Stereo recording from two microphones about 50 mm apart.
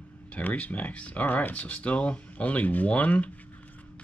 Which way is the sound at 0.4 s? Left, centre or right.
Left.